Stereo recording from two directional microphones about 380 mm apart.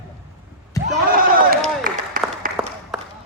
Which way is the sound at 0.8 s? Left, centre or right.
Centre.